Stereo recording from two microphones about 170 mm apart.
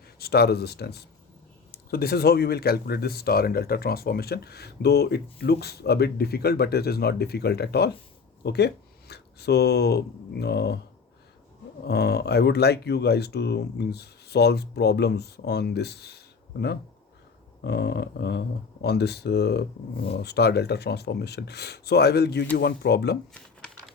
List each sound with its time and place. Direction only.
0.2 s speech: 70° left (ahead or behind)
11.9 s speech: 75° left (ahead or behind)
23.3 s a sound: 5° left (ahead or behind)